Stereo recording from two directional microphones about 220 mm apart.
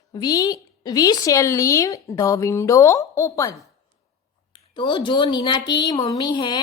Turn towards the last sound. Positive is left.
turn(degrees=20)  # may be behind; listen again after turning